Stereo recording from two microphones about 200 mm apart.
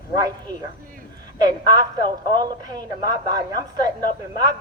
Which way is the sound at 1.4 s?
20° right (ahead or behind).